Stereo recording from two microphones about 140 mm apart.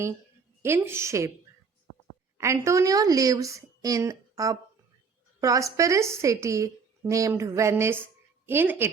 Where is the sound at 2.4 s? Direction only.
20° right (ahead or behind).